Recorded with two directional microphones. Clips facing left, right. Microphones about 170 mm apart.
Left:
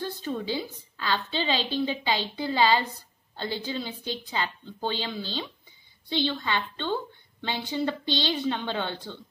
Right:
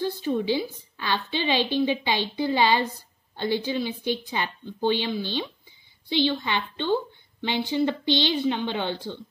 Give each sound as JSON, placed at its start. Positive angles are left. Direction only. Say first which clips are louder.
{"t": 0.2, "sound": "a woman's voice", "louder": "right 6 dB", "side_deg": -15}